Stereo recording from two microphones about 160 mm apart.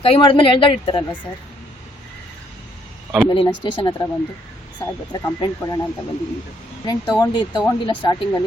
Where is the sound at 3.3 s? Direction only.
30° left (ahead or behind).